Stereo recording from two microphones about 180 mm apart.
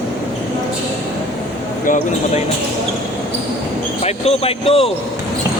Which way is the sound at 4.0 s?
35° left (ahead or behind).